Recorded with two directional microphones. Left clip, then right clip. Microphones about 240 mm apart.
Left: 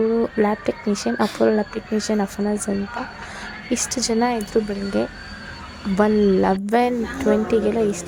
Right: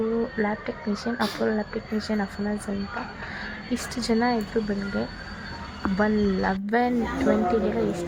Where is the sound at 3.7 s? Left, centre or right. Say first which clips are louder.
Left 5 dB; left.